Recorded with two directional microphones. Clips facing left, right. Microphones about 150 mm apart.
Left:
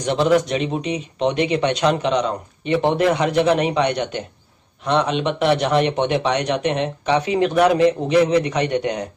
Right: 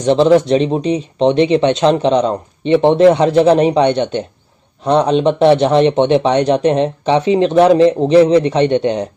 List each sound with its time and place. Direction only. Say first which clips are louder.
0.0 s speech: right 7 dB; 25° right (ahead or behind)